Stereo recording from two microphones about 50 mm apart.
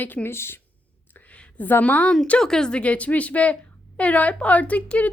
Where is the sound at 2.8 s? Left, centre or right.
Left.